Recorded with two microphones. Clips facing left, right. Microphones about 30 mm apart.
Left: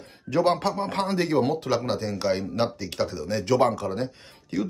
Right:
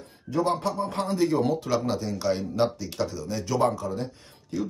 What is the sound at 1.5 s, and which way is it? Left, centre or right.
Speech, left.